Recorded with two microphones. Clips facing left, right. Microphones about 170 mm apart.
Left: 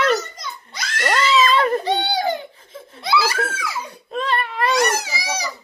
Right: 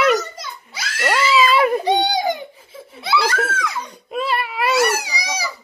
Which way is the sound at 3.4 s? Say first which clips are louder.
Right 3 dB; 5° left (ahead or behind).